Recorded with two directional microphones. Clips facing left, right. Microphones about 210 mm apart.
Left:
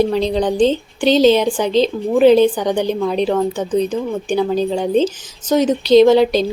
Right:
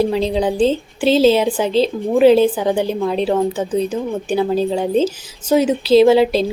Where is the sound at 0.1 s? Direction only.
5° right (ahead or behind).